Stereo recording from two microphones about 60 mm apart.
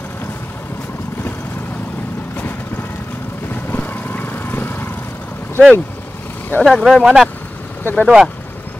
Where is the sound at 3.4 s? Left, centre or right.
Left.